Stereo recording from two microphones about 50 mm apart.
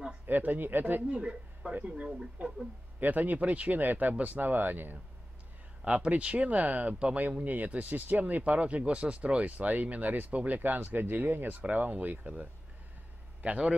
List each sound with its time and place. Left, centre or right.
0.3 s speech: right
1.0 s speech: right
5.9 s a man's voice: right